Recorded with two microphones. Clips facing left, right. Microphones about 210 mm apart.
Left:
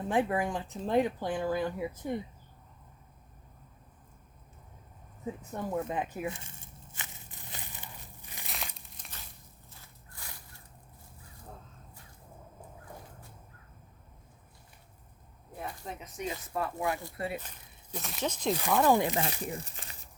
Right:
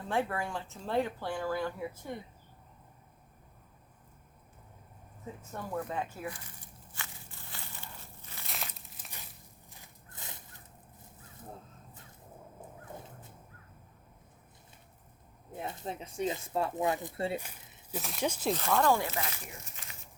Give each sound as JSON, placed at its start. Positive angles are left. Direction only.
{"t": 0.0, "sound": "speech", "side_deg": 15}
{"t": 5.5, "sound": "a sound", "side_deg": 20}
{"t": 8.4, "sound": "crumpling", "side_deg": 0}
{"t": 9.6, "sound": "a sound", "side_deg": -15}
{"t": 15.5, "sound": "speech", "side_deg": -25}
{"t": 17.3, "sound": "speech", "side_deg": -10}
{"t": 18.5, "sound": "speech", "side_deg": 15}
{"t": 19.2, "sound": "speech", "side_deg": 35}